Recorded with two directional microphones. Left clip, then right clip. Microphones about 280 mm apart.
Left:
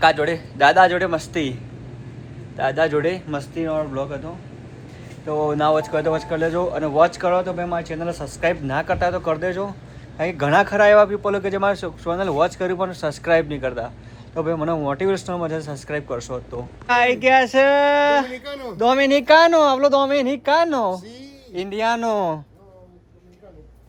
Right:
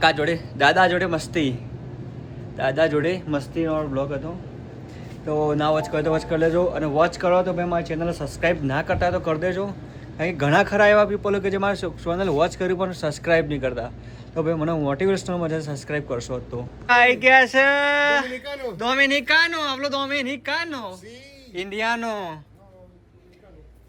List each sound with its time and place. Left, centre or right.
0.0 s speech: centre
2.6 s speech: centre
16.8 s speech: centre
18.4 s speech: centre
18.8 s a woman's voice: centre